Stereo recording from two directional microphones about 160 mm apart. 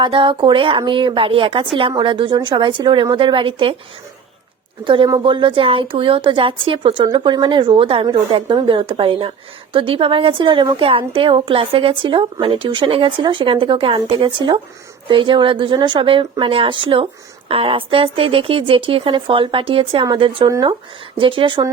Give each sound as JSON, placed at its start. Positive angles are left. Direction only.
{"t": 0.0, "sound": "a woman's voice", "side_deg": -30}
{"t": 4.9, "sound": "a woman's voice", "side_deg": -30}